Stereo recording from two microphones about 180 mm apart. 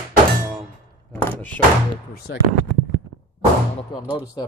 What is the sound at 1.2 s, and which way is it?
Clang, 10° left (ahead or behind).